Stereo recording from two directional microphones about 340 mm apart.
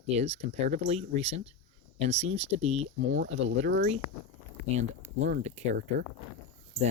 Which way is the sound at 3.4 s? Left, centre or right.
Right.